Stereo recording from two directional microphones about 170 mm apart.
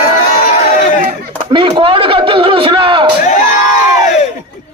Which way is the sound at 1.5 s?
30° right (ahead or behind).